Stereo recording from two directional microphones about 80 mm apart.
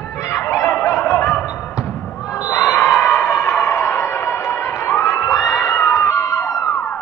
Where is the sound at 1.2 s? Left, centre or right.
Centre.